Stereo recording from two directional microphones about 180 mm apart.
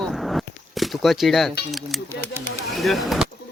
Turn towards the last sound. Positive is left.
turn(degrees=0)  # may be behind; listen again after turning